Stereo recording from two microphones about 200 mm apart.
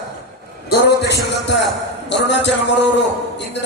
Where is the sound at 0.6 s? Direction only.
60° left (ahead or behind).